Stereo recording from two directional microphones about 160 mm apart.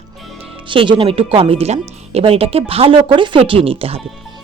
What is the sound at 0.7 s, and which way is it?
Speech, 30° right (ahead or behind).